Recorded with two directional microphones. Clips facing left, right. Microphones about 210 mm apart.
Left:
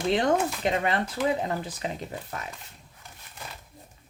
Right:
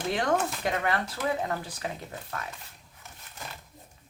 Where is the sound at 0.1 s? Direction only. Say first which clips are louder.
Left 3 dB; 25° left (ahead or behind).